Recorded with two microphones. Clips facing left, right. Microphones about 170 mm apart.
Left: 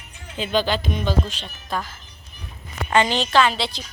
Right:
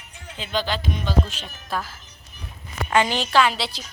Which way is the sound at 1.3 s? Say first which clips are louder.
Left 1 dB; 5° right (ahead or behind).